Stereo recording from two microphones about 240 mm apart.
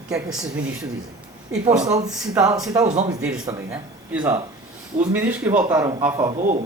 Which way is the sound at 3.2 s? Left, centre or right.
Centre.